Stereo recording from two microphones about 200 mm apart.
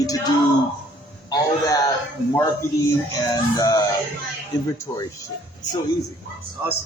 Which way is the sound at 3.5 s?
20° left (ahead or behind).